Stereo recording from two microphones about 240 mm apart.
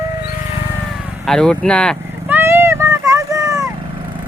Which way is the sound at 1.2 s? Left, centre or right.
Centre.